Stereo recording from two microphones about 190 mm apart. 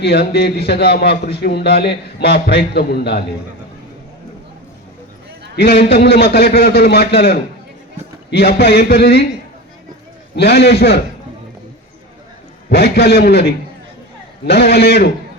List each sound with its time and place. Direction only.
0.0 s a man's voice: 60° left (ahead or behind)
5.5 s a man's voice: 55° left (ahead or behind)
8.3 s a man's voice: 55° left (ahead or behind)
10.3 s a man's voice: 60° left (ahead or behind)
12.6 s a man's voice: 60° left (ahead or behind)